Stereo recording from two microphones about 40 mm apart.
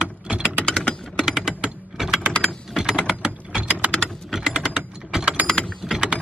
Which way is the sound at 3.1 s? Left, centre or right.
Right.